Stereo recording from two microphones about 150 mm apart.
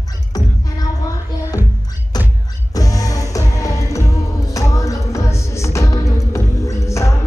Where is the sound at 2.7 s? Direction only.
25° left (ahead or behind).